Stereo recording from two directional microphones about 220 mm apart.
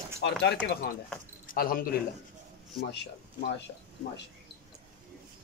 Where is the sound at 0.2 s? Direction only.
50° left (ahead or behind).